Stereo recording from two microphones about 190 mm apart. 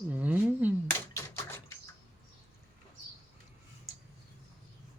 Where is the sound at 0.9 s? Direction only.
15° left (ahead or behind).